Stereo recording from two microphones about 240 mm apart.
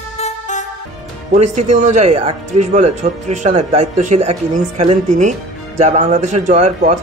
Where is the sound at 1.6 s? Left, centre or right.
Right.